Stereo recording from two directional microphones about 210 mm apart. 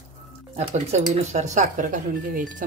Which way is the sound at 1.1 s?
35° right (ahead or behind).